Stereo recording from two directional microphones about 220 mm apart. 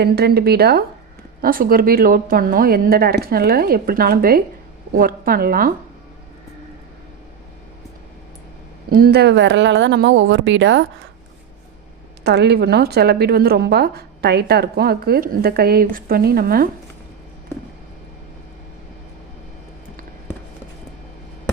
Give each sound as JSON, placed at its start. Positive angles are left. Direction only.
{"t": 0.0, "sound": "a woman's voice", "side_deg": -45}
{"t": 8.9, "sound": "speech", "side_deg": -45}
{"t": 12.2, "sound": "a woman's voice", "side_deg": -50}